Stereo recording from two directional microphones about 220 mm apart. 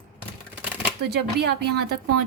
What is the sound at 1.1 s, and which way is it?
Speech, 50° right (ahead or behind).